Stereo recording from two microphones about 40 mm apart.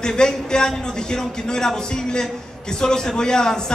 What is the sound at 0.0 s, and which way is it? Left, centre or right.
A man's voice, centre.